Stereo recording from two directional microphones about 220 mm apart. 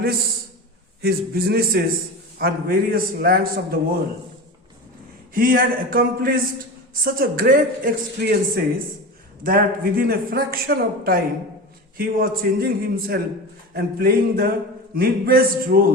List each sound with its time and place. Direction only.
1.0 s a man's voice: 45° right (ahead or behind)
5.3 s a man's voice: 40° right (ahead or behind)